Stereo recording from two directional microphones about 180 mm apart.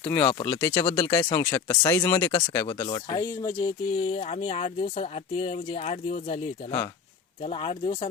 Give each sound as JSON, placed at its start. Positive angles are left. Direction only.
{"t": 0.1, "sound": "speech", "side_deg": 10}